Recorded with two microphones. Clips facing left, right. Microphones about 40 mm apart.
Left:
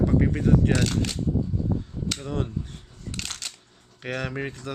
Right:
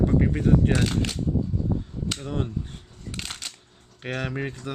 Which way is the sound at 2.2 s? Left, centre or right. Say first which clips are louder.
Even; centre.